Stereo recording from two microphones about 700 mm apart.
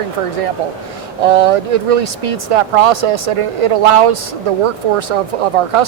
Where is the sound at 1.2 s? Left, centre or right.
Right.